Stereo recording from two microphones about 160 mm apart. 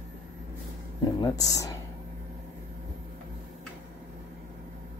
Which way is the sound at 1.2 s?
20° left (ahead or behind).